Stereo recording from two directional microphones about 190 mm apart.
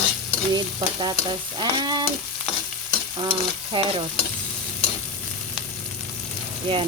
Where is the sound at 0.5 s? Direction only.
20° right (ahead or behind).